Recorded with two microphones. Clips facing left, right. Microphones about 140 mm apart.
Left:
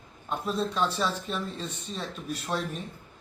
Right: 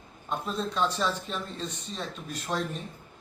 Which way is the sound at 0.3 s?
10° left (ahead or behind).